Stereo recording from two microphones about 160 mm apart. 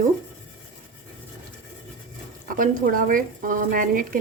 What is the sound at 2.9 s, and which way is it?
A woman's voice, 60° right (ahead or behind).